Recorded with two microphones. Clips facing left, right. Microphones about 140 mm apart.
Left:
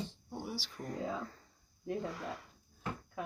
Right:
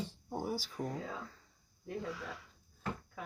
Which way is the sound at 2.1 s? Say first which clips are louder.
Left 1 dB; 50° left (ahead or behind).